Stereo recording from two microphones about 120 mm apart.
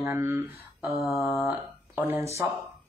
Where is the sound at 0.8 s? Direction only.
Centre (ahead or behind).